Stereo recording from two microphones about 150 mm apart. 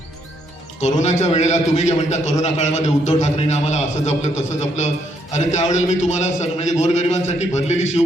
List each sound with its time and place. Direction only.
0.8 s a man's voice: 50° left (ahead or behind)